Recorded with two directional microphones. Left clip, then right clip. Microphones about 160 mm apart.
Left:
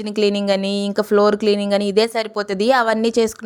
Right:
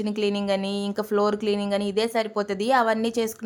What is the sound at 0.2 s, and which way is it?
Speech, 35° left (ahead or behind).